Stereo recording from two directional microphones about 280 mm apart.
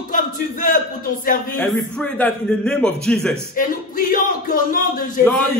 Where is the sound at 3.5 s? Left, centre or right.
Left.